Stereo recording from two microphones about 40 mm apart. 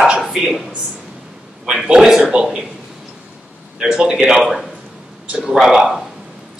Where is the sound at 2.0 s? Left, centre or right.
Centre.